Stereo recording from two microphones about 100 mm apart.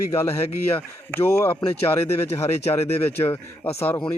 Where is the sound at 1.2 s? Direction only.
25° left (ahead or behind).